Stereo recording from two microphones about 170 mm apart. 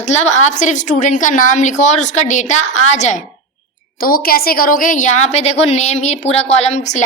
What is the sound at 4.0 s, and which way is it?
A woman's voice, 60° left (ahead or behind).